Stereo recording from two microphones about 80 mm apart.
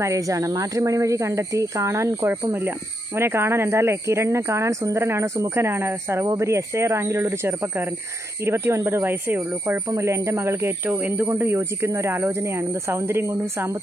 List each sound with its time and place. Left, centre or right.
0.0 s speech: right